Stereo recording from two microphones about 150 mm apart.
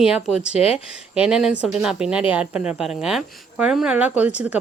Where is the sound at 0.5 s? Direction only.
45° left (ahead or behind).